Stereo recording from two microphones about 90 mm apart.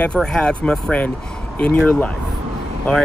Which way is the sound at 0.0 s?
10° left (ahead or behind).